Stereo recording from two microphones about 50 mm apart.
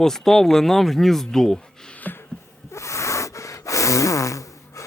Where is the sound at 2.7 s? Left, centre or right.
Left.